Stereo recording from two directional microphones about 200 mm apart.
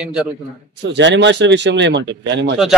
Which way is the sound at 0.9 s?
65° right (ahead or behind).